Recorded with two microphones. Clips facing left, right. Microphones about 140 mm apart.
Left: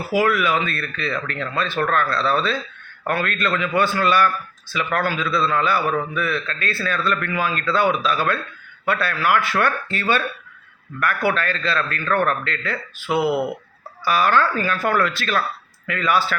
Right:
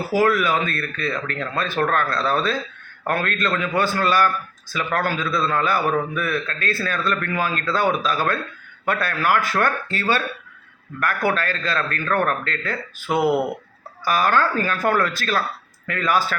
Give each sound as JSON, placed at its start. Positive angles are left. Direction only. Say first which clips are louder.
{"t": 0.1, "sound": "a man's voice", "louder": "even", "side_deg": -40}